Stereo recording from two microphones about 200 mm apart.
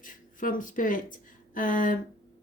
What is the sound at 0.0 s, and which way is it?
Speech, 40° left (ahead or behind).